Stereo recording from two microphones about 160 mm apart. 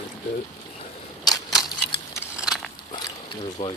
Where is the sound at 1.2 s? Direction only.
25° left (ahead or behind).